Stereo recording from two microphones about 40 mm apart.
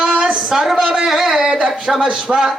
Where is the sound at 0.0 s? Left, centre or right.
Right.